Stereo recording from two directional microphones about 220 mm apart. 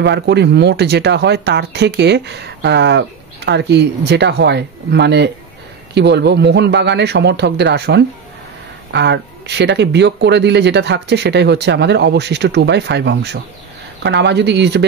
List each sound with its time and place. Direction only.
0.0 s speech: 50° right (ahead or behind)